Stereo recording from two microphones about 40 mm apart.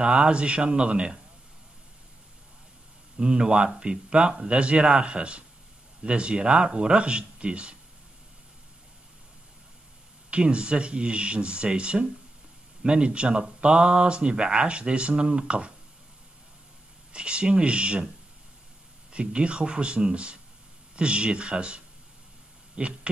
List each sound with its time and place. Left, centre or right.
0.0 s speech: right
3.2 s speech: centre
10.3 s speech: right
17.1 s speech: right
19.1 s speech: right